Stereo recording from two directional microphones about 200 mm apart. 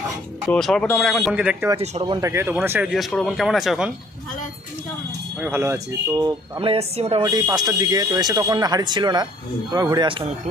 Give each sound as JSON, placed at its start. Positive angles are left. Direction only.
{"t": 0.4, "sound": "speech", "side_deg": 5}
{"t": 1.8, "sound": "speech", "side_deg": -25}
{"t": 2.2, "sound": "speech", "side_deg": -15}
{"t": 5.4, "sound": "speech", "side_deg": -10}